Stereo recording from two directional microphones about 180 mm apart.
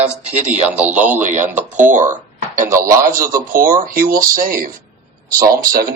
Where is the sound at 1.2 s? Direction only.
45° right (ahead or behind).